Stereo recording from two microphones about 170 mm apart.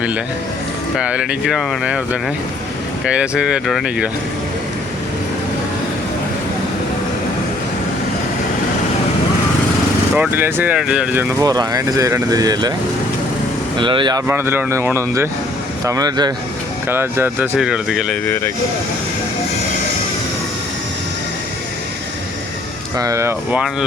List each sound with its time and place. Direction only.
0.9 s speech: 5° right (ahead or behind)
3.0 s speech: 5° right (ahead or behind)
10.2 s speech: 10° right (ahead or behind)
13.7 s speech: 30° right (ahead or behind)
14.3 s speech: 15° right (ahead or behind)
16.9 s speech: 15° right (ahead or behind)
18.3 s speech: 15° left (ahead or behind)
23.0 s speech: 20° right (ahead or behind)